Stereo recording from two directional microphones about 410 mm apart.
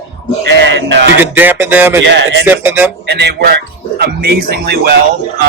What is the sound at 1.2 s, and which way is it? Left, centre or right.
Speech, centre.